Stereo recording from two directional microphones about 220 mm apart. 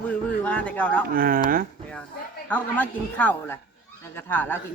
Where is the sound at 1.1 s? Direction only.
40° right (ahead or behind).